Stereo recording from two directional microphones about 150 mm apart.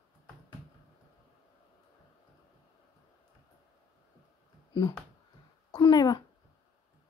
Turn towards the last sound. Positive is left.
turn(degrees=25)  # may be behind; listen again after turning